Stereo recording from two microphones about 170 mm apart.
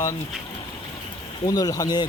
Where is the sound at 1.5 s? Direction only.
20° left (ahead or behind).